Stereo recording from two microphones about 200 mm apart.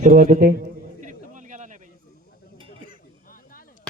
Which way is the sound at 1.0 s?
40° right (ahead or behind).